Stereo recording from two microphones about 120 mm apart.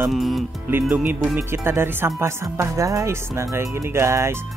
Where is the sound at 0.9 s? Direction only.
15° right (ahead or behind).